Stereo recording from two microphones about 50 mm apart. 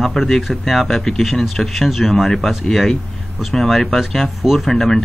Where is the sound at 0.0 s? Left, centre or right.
Centre.